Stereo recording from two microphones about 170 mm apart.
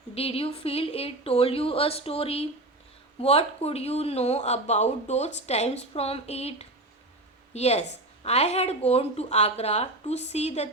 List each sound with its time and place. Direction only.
0.1 s speech: 35° left (ahead or behind)